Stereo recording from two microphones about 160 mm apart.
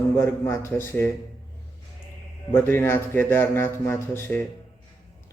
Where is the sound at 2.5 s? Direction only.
15° left (ahead or behind).